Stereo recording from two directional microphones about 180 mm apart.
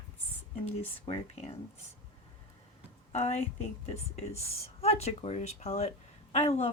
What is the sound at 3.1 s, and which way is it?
A woman's voice, 35° left (ahead or behind).